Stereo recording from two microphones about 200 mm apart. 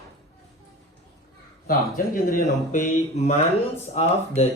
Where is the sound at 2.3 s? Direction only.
40° left (ahead or behind).